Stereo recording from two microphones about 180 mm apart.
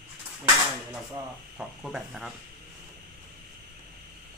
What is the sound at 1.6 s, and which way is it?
Speech, centre (ahead or behind).